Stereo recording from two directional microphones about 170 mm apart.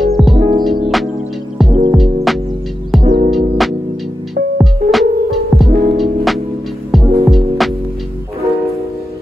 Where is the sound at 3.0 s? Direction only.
40° right (ahead or behind).